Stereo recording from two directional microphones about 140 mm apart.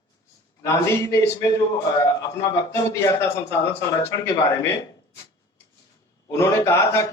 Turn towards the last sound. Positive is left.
turn(degrees=20)  # may be behind; listen again after turning